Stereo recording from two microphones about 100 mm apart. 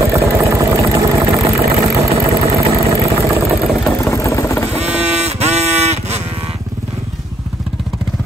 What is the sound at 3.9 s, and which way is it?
Vehicle, 30° left (ahead or behind).